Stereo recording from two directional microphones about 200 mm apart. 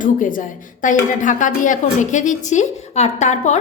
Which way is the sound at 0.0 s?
40° left (ahead or behind).